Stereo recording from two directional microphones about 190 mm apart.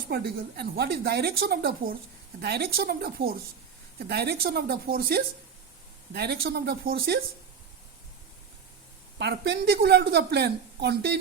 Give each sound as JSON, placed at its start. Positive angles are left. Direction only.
{"t": 0.1, "sound": "a woman's voice", "side_deg": -60}
{"t": 9.1, "sound": "a woman's voice", "side_deg": -60}